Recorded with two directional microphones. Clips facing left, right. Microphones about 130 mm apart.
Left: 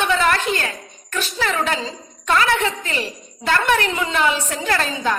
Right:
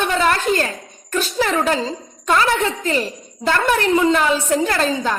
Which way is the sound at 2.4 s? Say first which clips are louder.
Right 1 dB; 35° right (ahead or behind).